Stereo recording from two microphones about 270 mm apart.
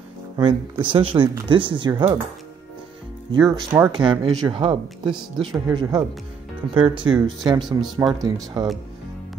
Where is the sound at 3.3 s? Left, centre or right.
Centre.